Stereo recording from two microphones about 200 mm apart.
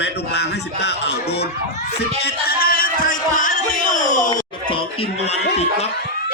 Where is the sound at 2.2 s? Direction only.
50° left (ahead or behind).